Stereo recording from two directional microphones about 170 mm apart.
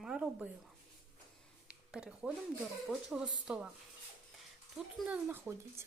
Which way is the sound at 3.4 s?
5° right (ahead or behind).